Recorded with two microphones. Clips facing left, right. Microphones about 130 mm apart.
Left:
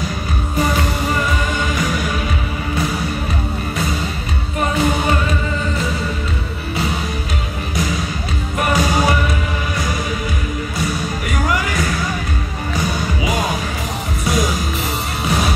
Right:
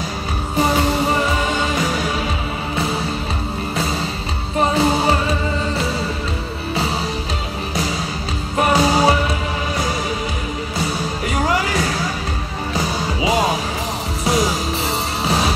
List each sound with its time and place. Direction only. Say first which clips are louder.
0.6 s music: right 3 dB; 30° right (ahead or behind)
4.6 s music: right 2 dB; 30° right (ahead or behind)
8.5 s music: right 2 dB; 30° right (ahead or behind)
10.9 s music: even; 30° right (ahead or behind)
13.2 s music: right 5 dB; 30° right (ahead or behind)